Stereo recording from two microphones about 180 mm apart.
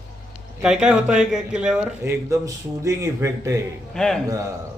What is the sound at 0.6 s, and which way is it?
A man's voice, 5° right (ahead or behind).